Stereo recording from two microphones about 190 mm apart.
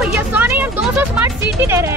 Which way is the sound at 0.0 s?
5° right (ahead or behind).